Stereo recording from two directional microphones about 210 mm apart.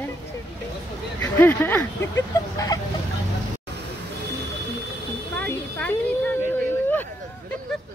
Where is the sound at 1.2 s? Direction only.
10° left (ahead or behind).